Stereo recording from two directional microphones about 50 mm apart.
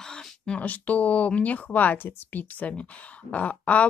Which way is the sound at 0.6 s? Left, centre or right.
Left.